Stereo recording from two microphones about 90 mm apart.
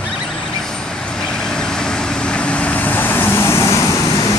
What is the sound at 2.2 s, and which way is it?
Vehicle, 10° left (ahead or behind).